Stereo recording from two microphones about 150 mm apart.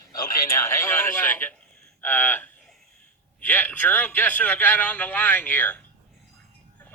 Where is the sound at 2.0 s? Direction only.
10° left (ahead or behind).